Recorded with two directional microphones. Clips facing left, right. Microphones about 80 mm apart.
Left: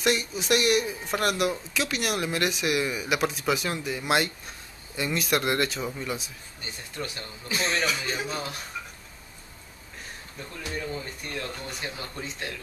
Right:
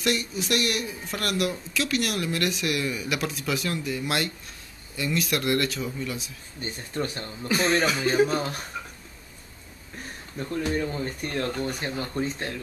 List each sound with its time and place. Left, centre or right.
0.0 s speech: centre
6.6 s speech: right
10.5 s speech: right